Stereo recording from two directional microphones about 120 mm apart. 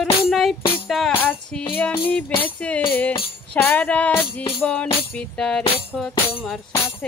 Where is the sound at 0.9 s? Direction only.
Centre (ahead or behind).